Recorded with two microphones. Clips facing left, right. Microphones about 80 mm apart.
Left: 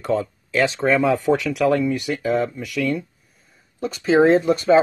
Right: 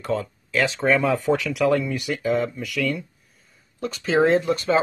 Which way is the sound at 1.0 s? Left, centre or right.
Centre.